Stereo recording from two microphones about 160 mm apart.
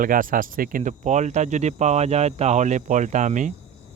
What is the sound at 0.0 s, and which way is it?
Speech, 60° right (ahead or behind).